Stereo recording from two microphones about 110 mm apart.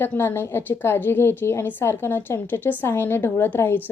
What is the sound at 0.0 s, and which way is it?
A woman's voice, 20° left (ahead or behind).